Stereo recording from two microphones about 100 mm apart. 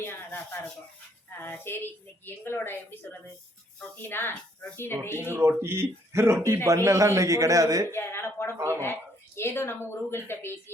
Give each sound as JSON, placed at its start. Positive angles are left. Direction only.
{"t": 0.0, "sound": "a woman's voice", "side_deg": 20}
{"t": 5.1, "sound": "a man's voice", "side_deg": -20}
{"t": 7.9, "sound": "a woman's voice", "side_deg": 25}
{"t": 8.5, "sound": "speech", "side_deg": -25}
{"t": 8.8, "sound": "a woman's voice", "side_deg": 25}